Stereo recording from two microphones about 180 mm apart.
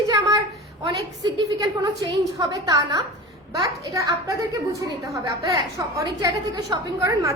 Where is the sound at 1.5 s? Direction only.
20° right (ahead or behind).